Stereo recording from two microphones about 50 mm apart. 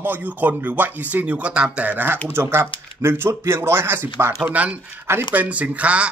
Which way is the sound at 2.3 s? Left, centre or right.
Right.